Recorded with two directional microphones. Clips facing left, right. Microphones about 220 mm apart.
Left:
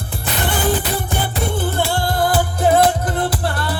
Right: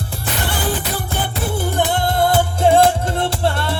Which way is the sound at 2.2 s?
25° right (ahead or behind).